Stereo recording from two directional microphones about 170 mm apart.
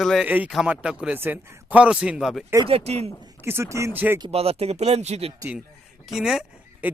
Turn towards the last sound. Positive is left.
turn(degrees=-5)  # may be behind; listen again after turning